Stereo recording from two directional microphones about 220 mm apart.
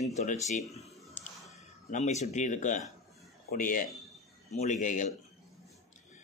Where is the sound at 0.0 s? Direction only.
30° left (ahead or behind).